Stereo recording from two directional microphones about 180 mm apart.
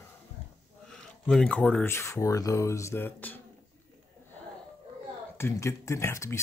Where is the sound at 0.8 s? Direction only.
5° left (ahead or behind).